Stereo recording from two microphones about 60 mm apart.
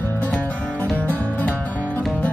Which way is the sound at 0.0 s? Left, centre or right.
Left.